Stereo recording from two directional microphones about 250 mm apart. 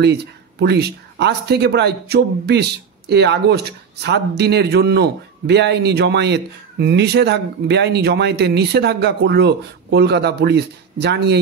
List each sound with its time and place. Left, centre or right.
0.0 s speech: right